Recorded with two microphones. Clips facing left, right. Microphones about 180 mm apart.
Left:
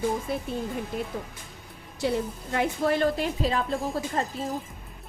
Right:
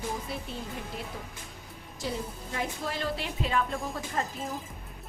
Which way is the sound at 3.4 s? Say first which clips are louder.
Even; 35° left (ahead or behind).